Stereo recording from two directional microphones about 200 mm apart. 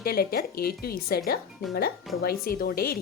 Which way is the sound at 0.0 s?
50° left (ahead or behind).